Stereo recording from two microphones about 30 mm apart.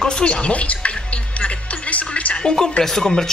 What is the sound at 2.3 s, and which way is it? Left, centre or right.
Speech, left.